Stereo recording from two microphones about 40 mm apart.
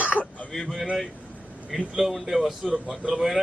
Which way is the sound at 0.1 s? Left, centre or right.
Left.